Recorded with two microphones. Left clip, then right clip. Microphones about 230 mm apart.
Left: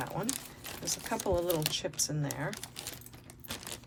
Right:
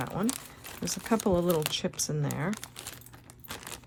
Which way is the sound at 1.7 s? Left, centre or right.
Right.